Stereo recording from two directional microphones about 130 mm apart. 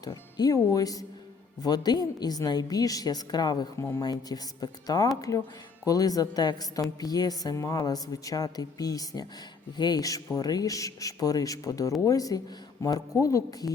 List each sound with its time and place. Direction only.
0.0 s a woman's voice: 30° left (ahead or behind)